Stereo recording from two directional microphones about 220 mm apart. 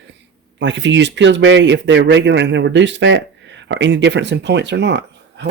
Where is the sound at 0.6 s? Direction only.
55° right (ahead or behind).